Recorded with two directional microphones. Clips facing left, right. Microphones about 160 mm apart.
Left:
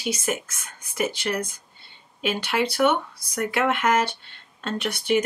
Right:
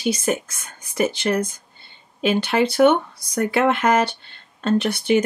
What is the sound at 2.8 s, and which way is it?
Speech, 30° right (ahead or behind).